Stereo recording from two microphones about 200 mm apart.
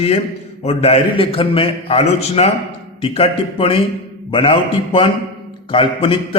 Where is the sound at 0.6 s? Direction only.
30° left (ahead or behind).